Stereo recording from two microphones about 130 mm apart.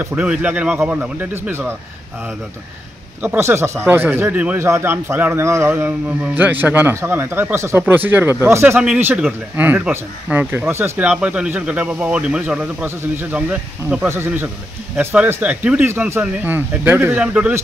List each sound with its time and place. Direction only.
0.1 s speech: 10° right (ahead or behind)
3.2 s speech: 20° right (ahead or behind)